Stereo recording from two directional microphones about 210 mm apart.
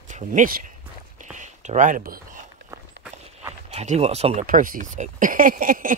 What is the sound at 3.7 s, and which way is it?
Speech, 30° right (ahead or behind).